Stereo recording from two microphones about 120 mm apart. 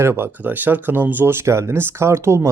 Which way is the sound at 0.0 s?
20° right (ahead or behind).